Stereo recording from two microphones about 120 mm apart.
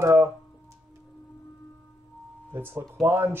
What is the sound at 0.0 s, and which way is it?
Music, 25° right (ahead or behind).